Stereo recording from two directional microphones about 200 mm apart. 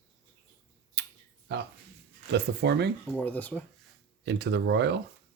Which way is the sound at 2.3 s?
55° right (ahead or behind).